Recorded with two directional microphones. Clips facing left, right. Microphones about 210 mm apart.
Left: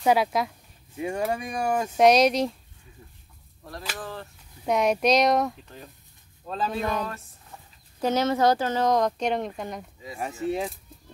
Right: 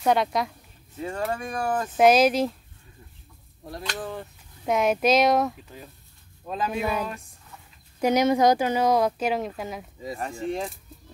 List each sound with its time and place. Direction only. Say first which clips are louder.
0.0 s speech: left 1 dB; 5° left (ahead or behind)
0.9 s speech: left 2 dB; 15° left (ahead or behind)
2.0 s speech: right 1 dB; 5° right (ahead or behind)
4.0 s speech: right 3 dB; 15° right (ahead or behind)
4.6 s speech: even; centre (ahead or behind)
6.4 s speech: right 1 dB; 10° right (ahead or behind); by 10.7 s 5° left (ahead or behind)